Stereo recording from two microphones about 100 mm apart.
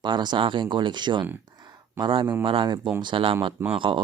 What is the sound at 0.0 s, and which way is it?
Speech, 50° right (ahead or behind).